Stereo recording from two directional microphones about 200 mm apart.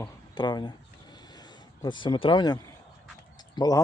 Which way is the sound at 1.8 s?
20° left (ahead or behind).